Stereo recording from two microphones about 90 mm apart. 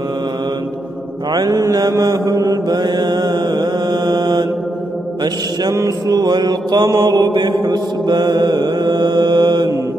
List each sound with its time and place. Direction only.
1.3 s mantra: 35° right (ahead or behind)
2.8 s mantra: 55° right (ahead or behind)
7.3 s mantra: 50° right (ahead or behind)